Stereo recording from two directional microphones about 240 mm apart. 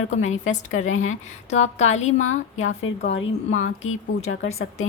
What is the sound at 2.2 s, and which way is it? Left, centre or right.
A woman's voice, left.